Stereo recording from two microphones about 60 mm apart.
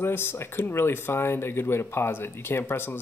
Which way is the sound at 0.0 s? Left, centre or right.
Left.